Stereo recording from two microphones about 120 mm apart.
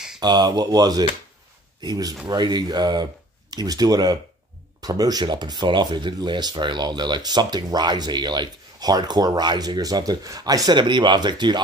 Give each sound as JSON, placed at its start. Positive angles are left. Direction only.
{"t": 0.2, "sound": "speech", "side_deg": -35}